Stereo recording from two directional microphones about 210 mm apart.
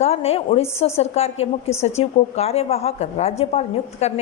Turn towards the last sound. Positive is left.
turn(degrees=30)  # may be behind; listen again after turning